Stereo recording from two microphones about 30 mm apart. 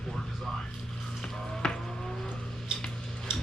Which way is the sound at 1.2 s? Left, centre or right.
Centre.